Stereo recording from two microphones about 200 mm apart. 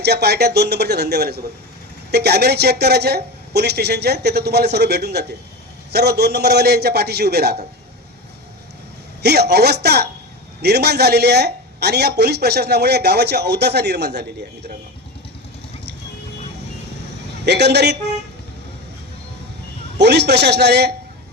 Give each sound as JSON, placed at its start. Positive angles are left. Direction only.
{"t": 0.0, "sound": "a man's voice", "side_deg": -55}
{"t": 9.2, "sound": "a man's voice", "side_deg": -55}
{"t": 17.4, "sound": "speech", "side_deg": -55}
{"t": 20.0, "sound": "speech", "side_deg": -55}